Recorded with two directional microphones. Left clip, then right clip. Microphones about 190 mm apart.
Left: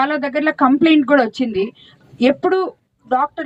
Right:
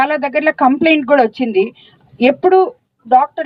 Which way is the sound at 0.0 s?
40° right (ahead or behind).